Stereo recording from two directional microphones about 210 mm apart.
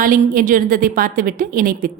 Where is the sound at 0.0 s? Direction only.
40° right (ahead or behind).